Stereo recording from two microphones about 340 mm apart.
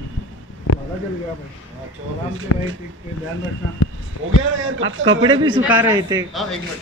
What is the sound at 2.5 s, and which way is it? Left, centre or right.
Speech, left.